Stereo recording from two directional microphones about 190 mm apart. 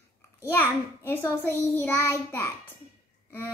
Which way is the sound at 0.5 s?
10° left (ahead or behind).